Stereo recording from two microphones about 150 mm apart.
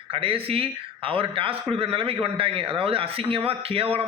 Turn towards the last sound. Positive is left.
turn(degrees=-40)  # may be behind; listen again after turning